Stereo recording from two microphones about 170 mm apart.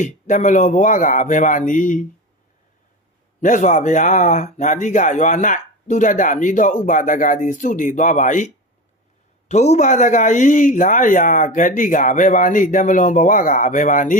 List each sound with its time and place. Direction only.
0.0 s speech: 45° left (ahead or behind)
3.4 s speech: 45° left (ahead or behind)
9.5 s speech: 40° left (ahead or behind)